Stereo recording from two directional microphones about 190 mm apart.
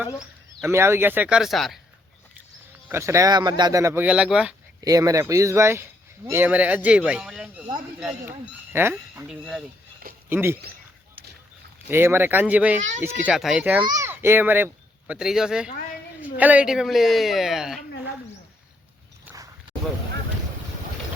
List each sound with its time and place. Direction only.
0.7 s a child's voice: 15° right (ahead or behind)
2.9 s a child's voice: 15° right (ahead or behind)
4.8 s a child's voice: 20° right (ahead or behind)
11.9 s a child's voice: 10° right (ahead or behind)